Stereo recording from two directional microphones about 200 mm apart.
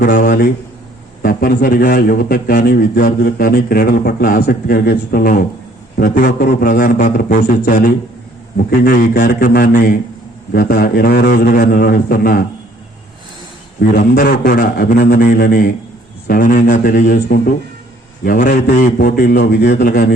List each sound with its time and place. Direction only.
0.0 s a man's voice: 50° left (ahead or behind)
13.9 s a man's voice: 45° left (ahead or behind)
18.9 s a man's voice: 50° left (ahead or behind)